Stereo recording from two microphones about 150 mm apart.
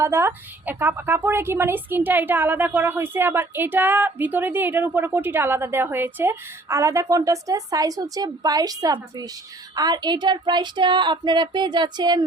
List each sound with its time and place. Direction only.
0.0 s a woman's voice: 15° right (ahead or behind)